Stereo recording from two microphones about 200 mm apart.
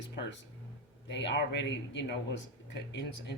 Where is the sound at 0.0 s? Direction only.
60° left (ahead or behind).